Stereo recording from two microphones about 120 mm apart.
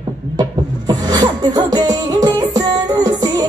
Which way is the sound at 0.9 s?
35° right (ahead or behind).